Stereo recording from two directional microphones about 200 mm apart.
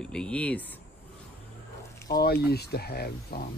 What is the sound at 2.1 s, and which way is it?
Speech, 50° left (ahead or behind).